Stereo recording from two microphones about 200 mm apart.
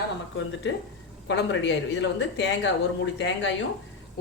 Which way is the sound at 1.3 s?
65° left (ahead or behind).